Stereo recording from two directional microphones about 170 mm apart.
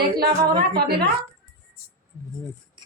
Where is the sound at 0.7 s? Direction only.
65° right (ahead or behind).